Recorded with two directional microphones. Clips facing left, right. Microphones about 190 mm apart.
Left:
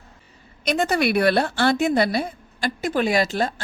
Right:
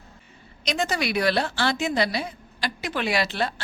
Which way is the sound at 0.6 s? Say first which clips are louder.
Left 5 dB; 55° left (ahead or behind).